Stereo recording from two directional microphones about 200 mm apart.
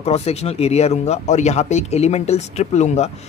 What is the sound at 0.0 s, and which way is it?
Speech, 30° left (ahead or behind).